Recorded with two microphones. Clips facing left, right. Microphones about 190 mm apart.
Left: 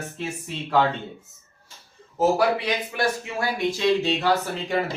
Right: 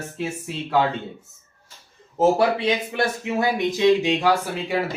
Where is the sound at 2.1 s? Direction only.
25° right (ahead or behind).